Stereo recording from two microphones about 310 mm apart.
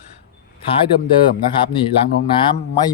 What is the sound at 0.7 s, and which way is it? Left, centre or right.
Speech, centre.